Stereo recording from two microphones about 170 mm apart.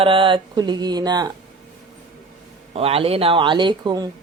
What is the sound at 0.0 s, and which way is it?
Speech, 30° right (ahead or behind).